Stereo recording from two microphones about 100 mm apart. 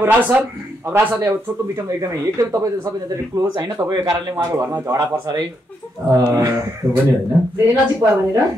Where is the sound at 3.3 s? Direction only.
50° right (ahead or behind).